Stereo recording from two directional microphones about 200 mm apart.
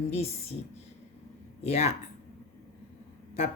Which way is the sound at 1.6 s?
35° left (ahead or behind).